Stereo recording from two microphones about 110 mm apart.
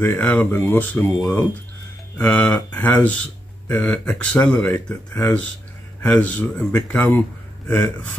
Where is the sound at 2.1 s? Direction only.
10° left (ahead or behind).